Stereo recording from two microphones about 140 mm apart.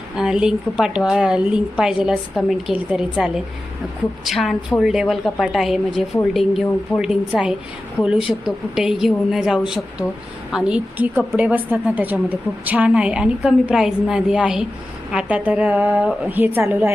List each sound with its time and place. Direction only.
0.2 s a woman's voice: 5° right (ahead or behind)